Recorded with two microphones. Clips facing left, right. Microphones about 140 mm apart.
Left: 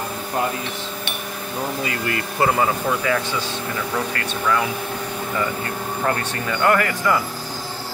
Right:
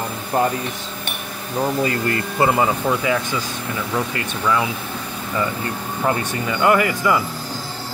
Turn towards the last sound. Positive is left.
turn(degrees=-10)  # may be behind; listen again after turning